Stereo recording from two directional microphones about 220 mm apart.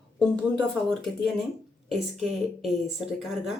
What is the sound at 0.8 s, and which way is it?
Speech, centre (ahead or behind).